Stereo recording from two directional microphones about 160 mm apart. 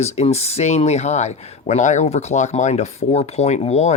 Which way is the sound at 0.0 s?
40° left (ahead or behind).